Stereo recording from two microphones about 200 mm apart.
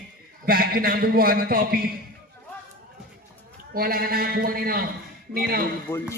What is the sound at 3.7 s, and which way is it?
A man's voice, 45° right (ahead or behind).